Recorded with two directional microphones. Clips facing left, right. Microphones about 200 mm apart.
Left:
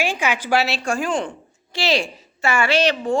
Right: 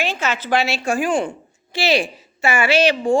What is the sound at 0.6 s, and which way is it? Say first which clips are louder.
A woman's voice: right 2 dB; centre (ahead or behind).